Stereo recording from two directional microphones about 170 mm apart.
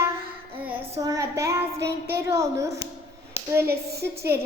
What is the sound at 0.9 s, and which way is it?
Child singing, 20° right (ahead or behind).